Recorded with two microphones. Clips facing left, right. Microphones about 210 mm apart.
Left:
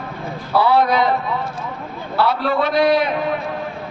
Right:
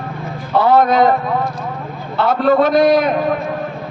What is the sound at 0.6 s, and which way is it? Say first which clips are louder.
A man's voice: right 4 dB; 45° right (ahead or behind).